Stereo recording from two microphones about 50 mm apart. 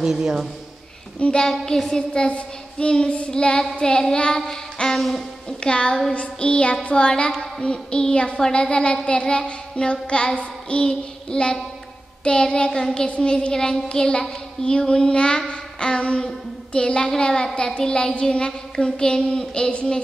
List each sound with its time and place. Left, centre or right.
0.0 s a man's voice: centre
1.3 s a woman's voice: centre
2.0 s child singing: centre
4.8 s a woman's voice: centre
5.6 s child singing: centre
16.3 s a sound: centre
17.1 s child singing: centre